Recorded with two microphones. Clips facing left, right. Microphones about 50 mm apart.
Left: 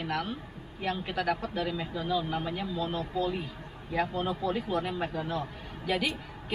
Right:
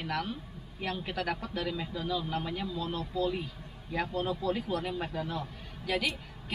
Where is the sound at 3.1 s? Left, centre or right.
Left.